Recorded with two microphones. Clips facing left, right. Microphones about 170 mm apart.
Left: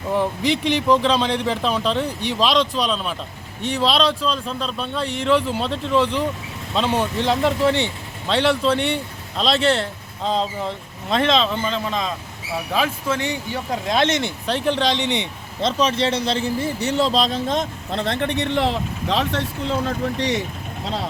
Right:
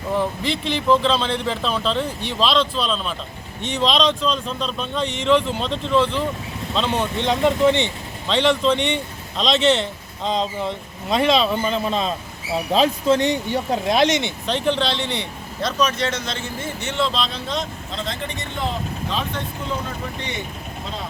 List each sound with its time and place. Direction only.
0.1 s speech: 15° left (ahead or behind); by 14.0 s 25° right (ahead or behind)
14.2 s speech: 5° left (ahead or behind); by 20.4 s 90° left